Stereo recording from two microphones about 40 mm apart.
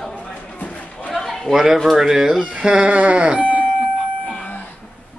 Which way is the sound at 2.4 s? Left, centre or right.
Right.